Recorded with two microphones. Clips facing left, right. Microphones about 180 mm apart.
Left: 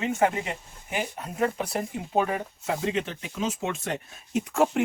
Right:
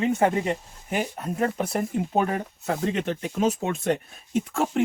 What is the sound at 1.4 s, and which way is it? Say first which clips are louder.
Speech: right 1 dB; 45° right (ahead or behind).